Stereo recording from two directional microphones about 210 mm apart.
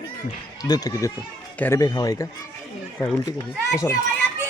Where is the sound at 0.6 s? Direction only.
15° left (ahead or behind).